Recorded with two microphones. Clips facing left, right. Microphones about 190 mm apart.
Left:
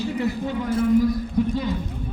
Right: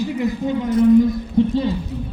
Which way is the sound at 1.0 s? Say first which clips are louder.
Right 5 dB; 25° right (ahead or behind).